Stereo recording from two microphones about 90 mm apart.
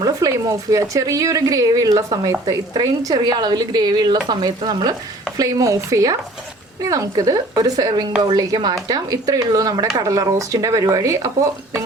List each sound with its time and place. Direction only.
0.0 s a woman's voice: 35° right (ahead or behind); by 4.9 s 55° right (ahead or behind)
5.4 s a woman's voice: 40° right (ahead or behind)